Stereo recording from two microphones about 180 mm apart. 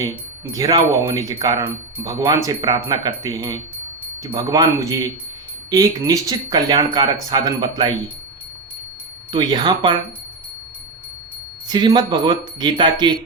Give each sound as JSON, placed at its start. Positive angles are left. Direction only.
{"t": 0.5, "sound": "speech", "side_deg": -20}
{"t": 9.3, "sound": "speech", "side_deg": -25}
{"t": 11.7, "sound": "speech", "side_deg": -25}